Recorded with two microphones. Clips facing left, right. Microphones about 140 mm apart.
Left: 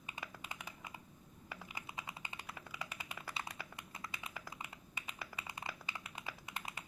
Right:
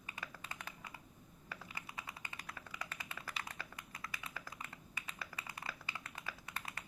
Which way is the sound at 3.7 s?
25° left (ahead or behind).